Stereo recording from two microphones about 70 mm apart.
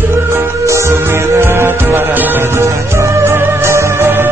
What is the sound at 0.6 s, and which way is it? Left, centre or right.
Music, right.